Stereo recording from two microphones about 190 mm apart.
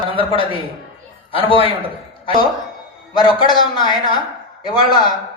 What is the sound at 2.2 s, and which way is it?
A man's voice, 25° left (ahead or behind).